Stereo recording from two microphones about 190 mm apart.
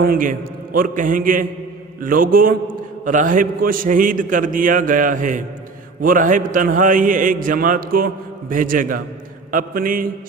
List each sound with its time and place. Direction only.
0.0 s a man's voice: 50° right (ahead or behind)